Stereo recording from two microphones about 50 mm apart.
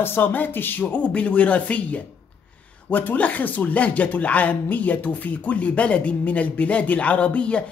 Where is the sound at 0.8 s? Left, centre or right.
Left.